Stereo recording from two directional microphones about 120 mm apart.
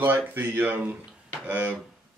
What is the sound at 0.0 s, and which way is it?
Speech, 15° right (ahead or behind).